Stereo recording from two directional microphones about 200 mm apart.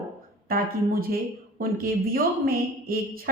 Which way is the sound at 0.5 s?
45° right (ahead or behind).